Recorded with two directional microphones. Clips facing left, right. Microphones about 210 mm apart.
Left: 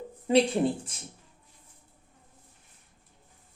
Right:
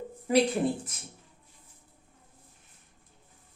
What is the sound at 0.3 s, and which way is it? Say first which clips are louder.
Speech: left 1 dB; 25° left (ahead or behind).